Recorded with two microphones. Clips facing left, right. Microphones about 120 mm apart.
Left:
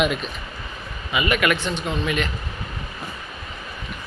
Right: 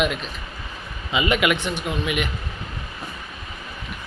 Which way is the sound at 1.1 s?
20° right (ahead or behind).